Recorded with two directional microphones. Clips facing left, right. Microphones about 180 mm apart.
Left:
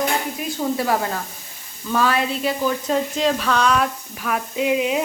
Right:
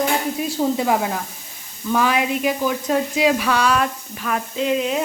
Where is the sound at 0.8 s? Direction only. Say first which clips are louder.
Right 2 dB; 15° right (ahead or behind).